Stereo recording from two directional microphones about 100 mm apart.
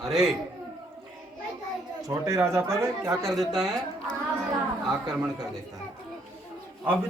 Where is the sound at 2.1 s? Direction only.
30° right (ahead or behind).